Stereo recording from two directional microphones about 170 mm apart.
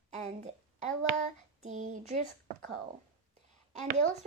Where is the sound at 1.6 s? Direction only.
45° right (ahead or behind).